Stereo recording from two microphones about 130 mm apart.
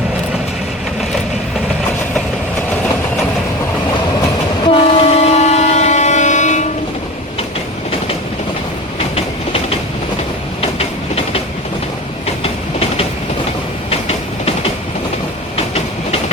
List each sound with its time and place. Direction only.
4.6 s train: 45° left (ahead or behind); by 6.7 s 65° left (ahead or behind)
9.1 s train: 50° left (ahead or behind)
12.4 s train: 50° left (ahead or behind)